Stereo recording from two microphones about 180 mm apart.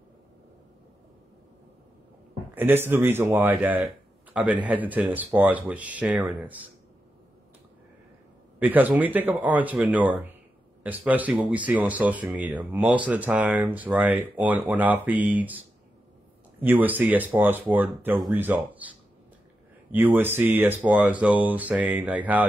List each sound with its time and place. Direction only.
2.5 s speech: 10° right (ahead or behind)
3.8 s a sound: 10° right (ahead or behind)
4.6 s speech: 10° right (ahead or behind)
8.5 s speech: 10° right (ahead or behind)
16.6 s speech: 10° right (ahead or behind)
19.9 s speech: 10° right (ahead or behind)